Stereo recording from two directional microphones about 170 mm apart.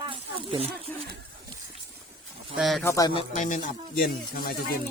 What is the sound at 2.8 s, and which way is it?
Speech, 20° left (ahead or behind).